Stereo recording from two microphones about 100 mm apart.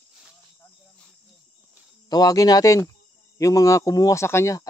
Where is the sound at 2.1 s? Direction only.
40° left (ahead or behind).